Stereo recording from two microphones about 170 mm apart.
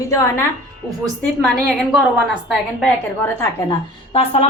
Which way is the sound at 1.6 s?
5° right (ahead or behind).